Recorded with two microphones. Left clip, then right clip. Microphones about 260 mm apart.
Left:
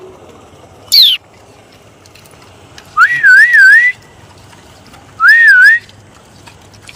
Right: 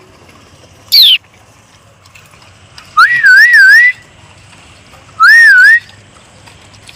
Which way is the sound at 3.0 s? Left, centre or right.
Centre.